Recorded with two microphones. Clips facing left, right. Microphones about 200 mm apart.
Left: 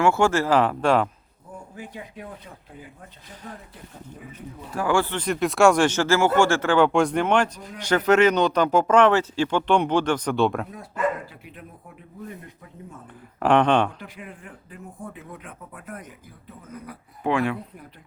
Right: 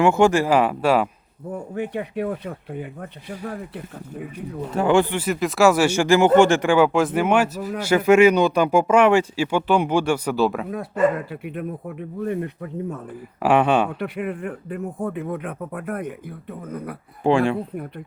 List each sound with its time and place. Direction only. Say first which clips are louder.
0.0 s speech: right 4 dB; 15° right (ahead or behind)
1.7 s speech: right 13 dB; 65° right (ahead or behind)
4.7 s speech: right 5 dB; 20° right (ahead or behind); by 10.7 s centre (ahead or behind)
11.3 s speech: right 14 dB; 60° right (ahead or behind)
13.4 s speech: right 1 dB; 5° right (ahead or behind)
14.0 s speech: right 14 dB; 65° right (ahead or behind)
17.2 s speech: right 5 dB; 30° right (ahead or behind)